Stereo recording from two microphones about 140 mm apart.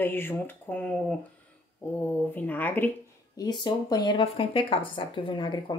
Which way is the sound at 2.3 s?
10° left (ahead or behind).